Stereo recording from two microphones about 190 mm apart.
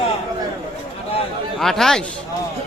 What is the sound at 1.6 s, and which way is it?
Speech, centre (ahead or behind).